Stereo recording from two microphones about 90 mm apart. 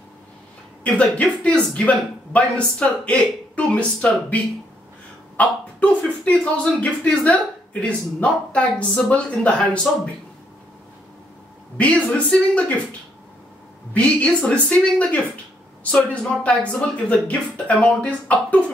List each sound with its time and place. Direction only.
0.8 s speech: 15° left (ahead or behind)
5.4 s speech: 15° left (ahead or behind)
11.7 s speech: 15° left (ahead or behind)
13.9 s speech: 15° left (ahead or behind)